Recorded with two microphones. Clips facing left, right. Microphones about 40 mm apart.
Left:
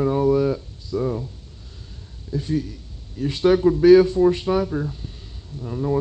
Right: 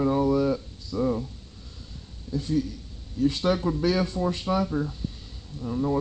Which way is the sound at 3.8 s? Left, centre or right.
Left.